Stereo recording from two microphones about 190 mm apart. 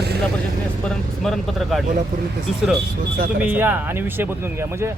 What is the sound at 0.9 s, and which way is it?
Speech, centre (ahead or behind).